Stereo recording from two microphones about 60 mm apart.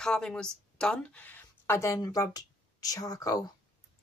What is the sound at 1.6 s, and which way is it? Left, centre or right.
Speech, left.